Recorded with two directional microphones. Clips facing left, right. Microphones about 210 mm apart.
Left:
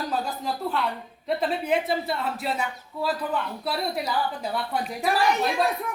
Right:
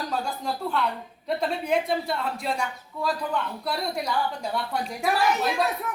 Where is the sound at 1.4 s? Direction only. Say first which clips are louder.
Even; 5° left (ahead or behind).